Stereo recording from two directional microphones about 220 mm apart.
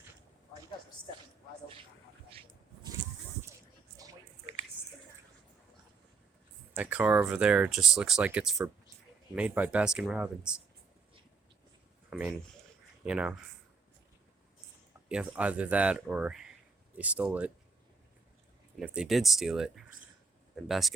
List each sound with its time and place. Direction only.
3.9 s a sound: 15° right (ahead or behind)
6.7 s speech: 5° right (ahead or behind)
12.1 s speech: centre (ahead or behind)
15.1 s speech: 5° right (ahead or behind)
18.8 s speech: centre (ahead or behind)